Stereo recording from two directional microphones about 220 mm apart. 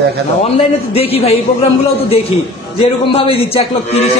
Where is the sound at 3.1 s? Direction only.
25° left (ahead or behind).